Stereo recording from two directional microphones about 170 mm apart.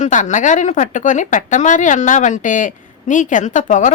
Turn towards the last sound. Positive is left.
turn(degrees=45)  # may be behind; listen again after turning